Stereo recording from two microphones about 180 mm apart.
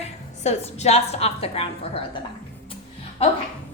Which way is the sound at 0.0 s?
35° left (ahead or behind).